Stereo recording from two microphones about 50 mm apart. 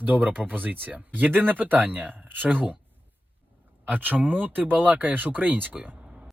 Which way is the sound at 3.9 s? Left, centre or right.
Right.